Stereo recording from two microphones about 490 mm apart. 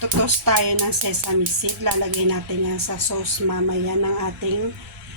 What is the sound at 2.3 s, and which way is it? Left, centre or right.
Speech, right.